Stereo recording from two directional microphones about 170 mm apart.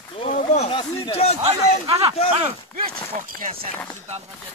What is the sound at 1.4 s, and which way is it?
Speech, 35° right (ahead or behind).